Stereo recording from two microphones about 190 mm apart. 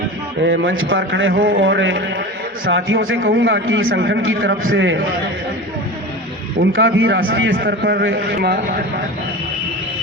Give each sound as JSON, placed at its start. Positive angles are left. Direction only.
{"t": 0.4, "sound": "a man's voice", "side_deg": -85}
{"t": 1.3, "sound": "speech", "side_deg": -50}
{"t": 1.5, "sound": "a man's voice", "side_deg": -85}
{"t": 2.6, "sound": "a man's voice", "side_deg": -85}
{"t": 6.6, "sound": "a man's voice", "side_deg": -90}
{"t": 7.3, "sound": "a man's voice", "side_deg": -70}